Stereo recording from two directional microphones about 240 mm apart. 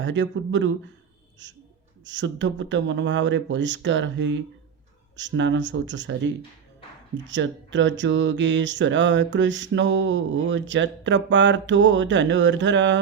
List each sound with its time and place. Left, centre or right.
0.0 s speech: right
2.0 s speech: right